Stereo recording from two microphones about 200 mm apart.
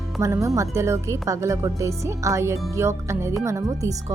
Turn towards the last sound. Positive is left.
turn(degrees=-15)  # may be behind; listen again after turning